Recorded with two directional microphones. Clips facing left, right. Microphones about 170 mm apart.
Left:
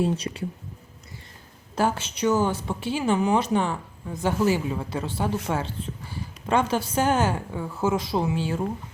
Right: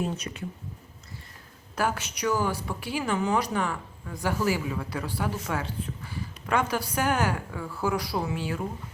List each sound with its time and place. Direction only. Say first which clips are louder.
0.0 s speech: left 6 dB; 30° left (ahead or behind)
1.7 s a woman's voice: left 4 dB; 25° left (ahead or behind)